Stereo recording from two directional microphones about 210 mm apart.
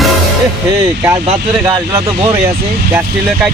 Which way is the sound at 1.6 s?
20° right (ahead or behind).